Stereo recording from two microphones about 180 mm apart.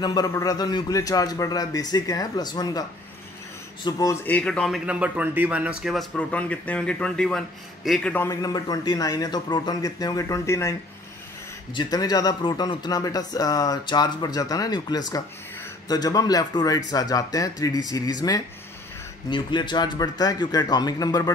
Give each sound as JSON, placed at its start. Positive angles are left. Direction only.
{"t": 0.0, "sound": "speech", "side_deg": 20}
{"t": 3.8, "sound": "speech", "side_deg": 20}
{"t": 4.3, "sound": "speech", "side_deg": 5}
{"t": 11.7, "sound": "speech", "side_deg": 25}